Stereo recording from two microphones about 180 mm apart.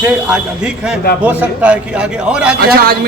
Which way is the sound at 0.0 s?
5° right (ahead or behind).